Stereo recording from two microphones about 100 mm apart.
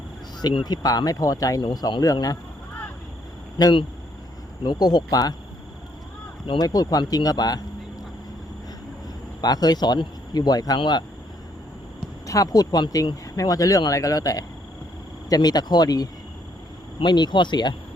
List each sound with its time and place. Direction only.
0.6 s speech: 40° left (ahead or behind)
3.6 s speech: 45° left (ahead or behind)
6.6 s speech: 40° left (ahead or behind)
9.4 s speech: 40° left (ahead or behind)
12.2 s speech: 35° left (ahead or behind)